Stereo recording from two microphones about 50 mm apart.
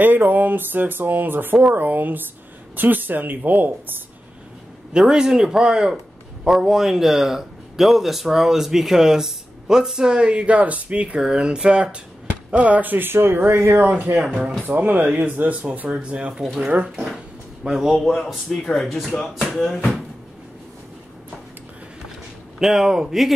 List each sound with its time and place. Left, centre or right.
0.0 s speech: right
4.9 s a man's voice: centre; by 13.8 s right
13.8 s speech: right
15.9 s speech: right
16.8 s a man's voice: centre
18.0 s speech: centre
22.6 s a man's voice: centre